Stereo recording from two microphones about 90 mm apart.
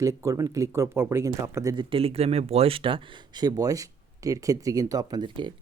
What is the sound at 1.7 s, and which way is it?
Speech, 75° right (ahead or behind).